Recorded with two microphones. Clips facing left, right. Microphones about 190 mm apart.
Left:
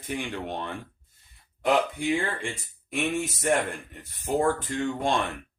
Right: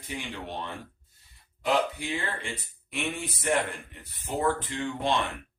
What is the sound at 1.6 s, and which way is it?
Speech, 50° left (ahead or behind).